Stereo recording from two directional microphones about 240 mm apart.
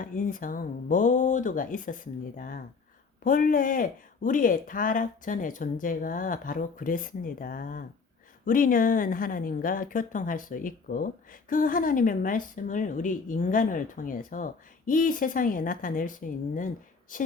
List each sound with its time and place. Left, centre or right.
0.0 s speech: left